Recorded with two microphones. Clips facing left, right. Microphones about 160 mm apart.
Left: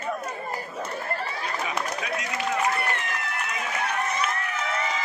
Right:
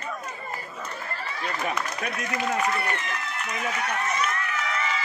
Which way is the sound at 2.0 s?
60° right (ahead or behind).